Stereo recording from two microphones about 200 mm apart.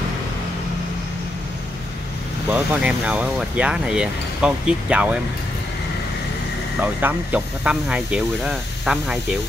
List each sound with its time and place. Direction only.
2.5 s speech: 5° right (ahead or behind)
6.8 s speech: 10° right (ahead or behind)